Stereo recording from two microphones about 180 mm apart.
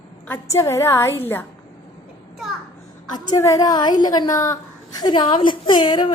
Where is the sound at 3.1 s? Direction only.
20° left (ahead or behind).